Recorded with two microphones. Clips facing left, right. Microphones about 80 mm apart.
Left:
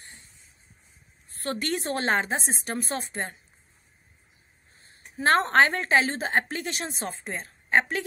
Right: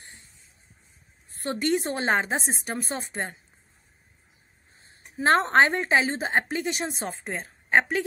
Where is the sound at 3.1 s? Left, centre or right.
Right.